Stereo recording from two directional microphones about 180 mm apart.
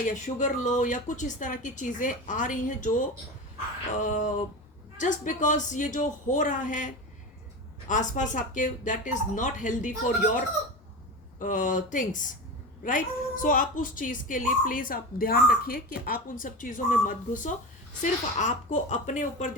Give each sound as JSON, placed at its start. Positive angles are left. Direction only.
{"t": 0.1, "sound": "a woman's voice", "side_deg": 45}
{"t": 11.3, "sound": "a woman's voice", "side_deg": 45}